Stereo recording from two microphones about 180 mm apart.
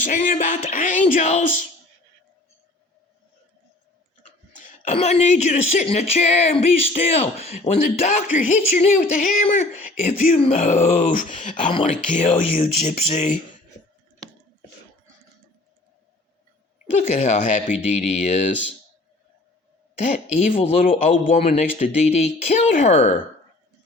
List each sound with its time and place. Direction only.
0.0 s speech: 45° left (ahead or behind)
4.5 s speech: 40° left (ahead or behind)
11.7 s speech: 30° left (ahead or behind)
17.2 s speech: 40° left (ahead or behind)
20.4 s speech: 40° left (ahead or behind)